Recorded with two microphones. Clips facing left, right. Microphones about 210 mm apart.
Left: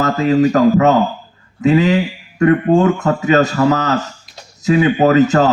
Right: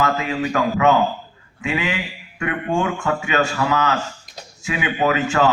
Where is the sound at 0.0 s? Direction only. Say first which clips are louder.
Left 8 dB; 40° left (ahead or behind).